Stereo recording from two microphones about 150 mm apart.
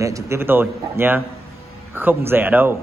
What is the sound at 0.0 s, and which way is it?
A man's voice, 20° right (ahead or behind).